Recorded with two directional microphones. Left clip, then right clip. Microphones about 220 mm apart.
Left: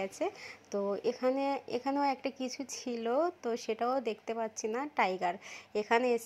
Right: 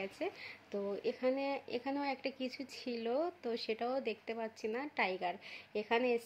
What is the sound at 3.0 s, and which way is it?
A woman's voice, 20° left (ahead or behind).